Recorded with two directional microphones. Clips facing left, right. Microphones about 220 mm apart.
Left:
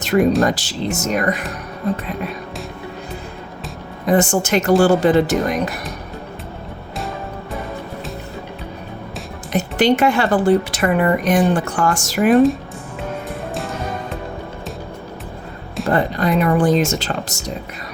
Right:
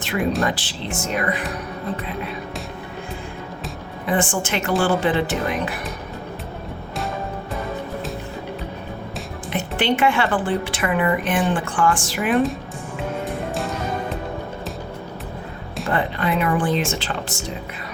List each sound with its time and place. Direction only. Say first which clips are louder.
0.0 s music: left 8 dB; 40° left (ahead or behind)
0.4 s speech: left 5 dB; 40° left (ahead or behind)
4.0 s speech: left 6 dB; 40° left (ahead or behind)
9.5 s speech: left 6 dB; 40° left (ahead or behind)
15.9 s speech: left 5 dB; 40° left (ahead or behind)